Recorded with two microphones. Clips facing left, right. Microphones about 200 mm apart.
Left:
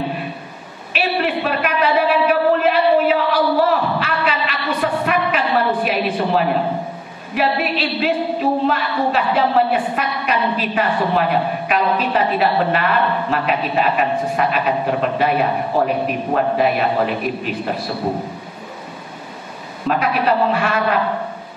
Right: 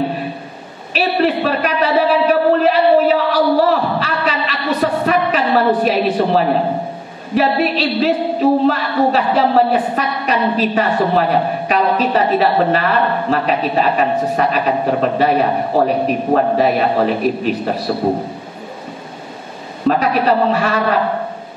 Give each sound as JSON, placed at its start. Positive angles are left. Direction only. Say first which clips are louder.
{"t": 0.9, "sound": "a sound", "louder": "right 4 dB", "side_deg": -35}
{"t": 7.3, "sound": "a woman's voice", "louder": "right 4 dB", "side_deg": -35}
{"t": 19.9, "sound": "a man's voice", "louder": "right 3 dB", "side_deg": -40}